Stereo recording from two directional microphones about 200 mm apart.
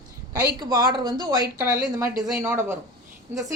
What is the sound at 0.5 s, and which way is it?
Speech, 20° right (ahead or behind).